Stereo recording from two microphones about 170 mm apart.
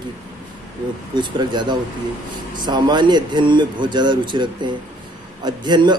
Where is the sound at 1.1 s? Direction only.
25° right (ahead or behind).